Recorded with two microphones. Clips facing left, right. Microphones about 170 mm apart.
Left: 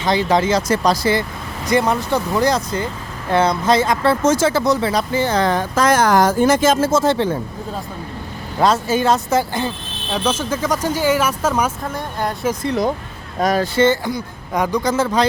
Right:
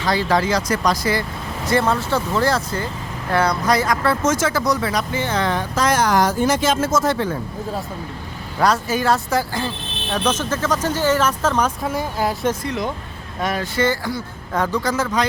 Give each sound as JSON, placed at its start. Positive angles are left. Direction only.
{"t": 0.0, "sound": "speech", "side_deg": 20}
{"t": 1.6, "sound": "speech", "side_deg": 15}
{"t": 6.7, "sound": "speech", "side_deg": 30}
{"t": 8.5, "sound": "speech", "side_deg": 25}
{"t": 10.2, "sound": "speech", "side_deg": 10}
{"t": 11.8, "sound": "speech", "side_deg": -5}
{"t": 12.6, "sound": "speech", "side_deg": 35}
{"t": 13.7, "sound": "speech", "side_deg": 25}